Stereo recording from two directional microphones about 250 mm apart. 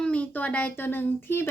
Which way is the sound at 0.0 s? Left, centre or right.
Centre.